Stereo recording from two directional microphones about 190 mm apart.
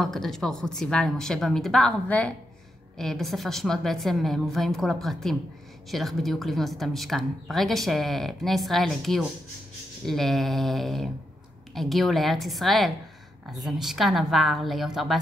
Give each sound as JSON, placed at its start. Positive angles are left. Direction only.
{"t": 0.0, "sound": "speech", "side_deg": 0}